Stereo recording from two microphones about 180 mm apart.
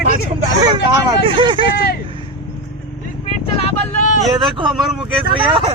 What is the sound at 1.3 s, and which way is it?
Vehicle, 25° right (ahead or behind).